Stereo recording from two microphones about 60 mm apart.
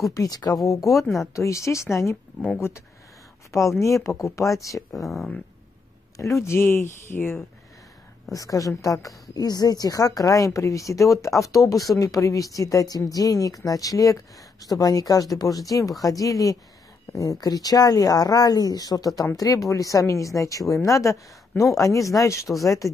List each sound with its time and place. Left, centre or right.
0.1 s speech: left
1.0 s speech: centre
1.3 s speech: left
3.8 s speech: left
4.9 s speech: centre
6.1 s speech: left
6.6 s speech: left
8.3 s a woman's voice: left
19.3 s speech: left
22.5 s speech: centre